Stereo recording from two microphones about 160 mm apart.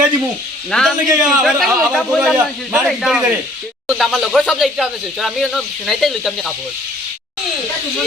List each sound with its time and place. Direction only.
0.7 s a man's voice: centre (ahead or behind)